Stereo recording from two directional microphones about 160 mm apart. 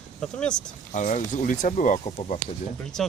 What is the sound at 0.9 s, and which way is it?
Speech, 50° left (ahead or behind).